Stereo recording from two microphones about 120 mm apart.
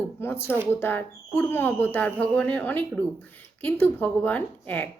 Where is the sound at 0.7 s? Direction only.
15° left (ahead or behind).